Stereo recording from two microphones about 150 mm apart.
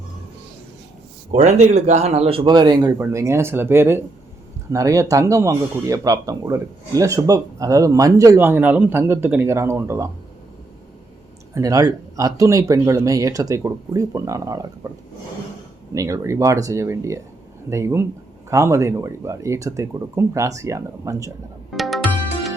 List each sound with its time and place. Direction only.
1.3 s speech: 50° right (ahead or behind); by 10.1 s 15° right (ahead or behind)
11.5 s speech: 25° right (ahead or behind)
16.0 s speech: 20° right (ahead or behind)
21.7 s music: centre (ahead or behind)